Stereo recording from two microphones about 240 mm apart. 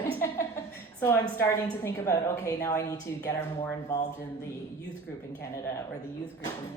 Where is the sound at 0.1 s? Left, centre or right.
Centre.